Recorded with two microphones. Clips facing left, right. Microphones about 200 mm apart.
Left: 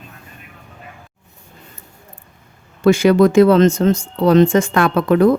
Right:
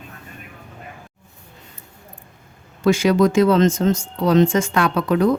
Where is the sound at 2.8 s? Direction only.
60° left (ahead or behind).